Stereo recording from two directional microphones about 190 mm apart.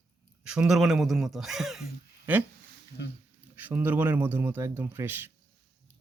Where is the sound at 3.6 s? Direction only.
10° right (ahead or behind).